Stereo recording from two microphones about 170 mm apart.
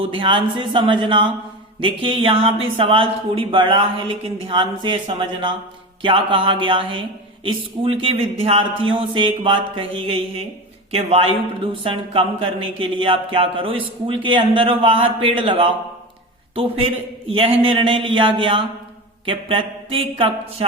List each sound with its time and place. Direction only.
0.0 s speech: 30° right (ahead or behind)
17.2 s speech: 35° right (ahead or behind)